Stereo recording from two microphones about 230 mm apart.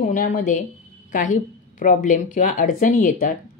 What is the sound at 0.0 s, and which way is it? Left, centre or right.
Speech, left.